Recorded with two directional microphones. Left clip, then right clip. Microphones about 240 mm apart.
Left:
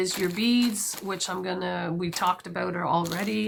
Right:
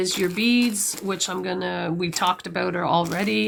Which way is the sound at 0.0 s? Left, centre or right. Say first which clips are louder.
Right 4 dB; right.